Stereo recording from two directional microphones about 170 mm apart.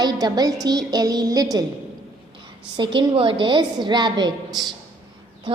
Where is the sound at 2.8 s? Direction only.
30° right (ahead or behind).